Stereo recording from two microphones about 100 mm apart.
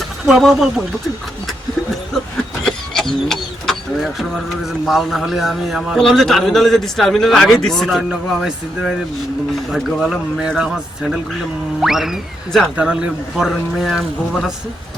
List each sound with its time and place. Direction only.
0.3 s speech: centre (ahead or behind)
2.6 s speech: 5° left (ahead or behind)